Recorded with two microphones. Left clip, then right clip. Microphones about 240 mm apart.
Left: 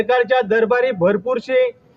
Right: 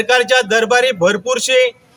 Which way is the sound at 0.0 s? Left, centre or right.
Centre.